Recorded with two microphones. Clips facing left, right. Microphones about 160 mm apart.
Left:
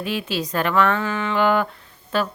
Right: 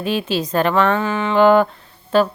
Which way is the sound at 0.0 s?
30° right (ahead or behind).